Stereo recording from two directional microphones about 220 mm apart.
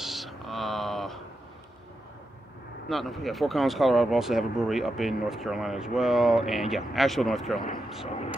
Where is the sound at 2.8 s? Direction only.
Centre (ahead or behind).